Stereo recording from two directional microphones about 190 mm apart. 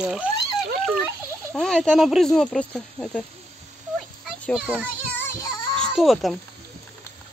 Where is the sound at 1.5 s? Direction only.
5° left (ahead or behind).